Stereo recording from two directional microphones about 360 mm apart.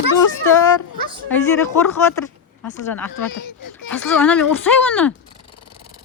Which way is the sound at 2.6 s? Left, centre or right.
Centre.